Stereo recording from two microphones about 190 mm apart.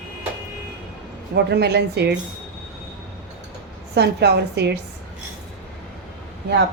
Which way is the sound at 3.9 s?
60° right (ahead or behind).